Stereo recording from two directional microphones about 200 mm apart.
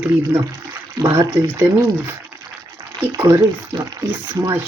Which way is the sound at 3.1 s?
15° right (ahead or behind).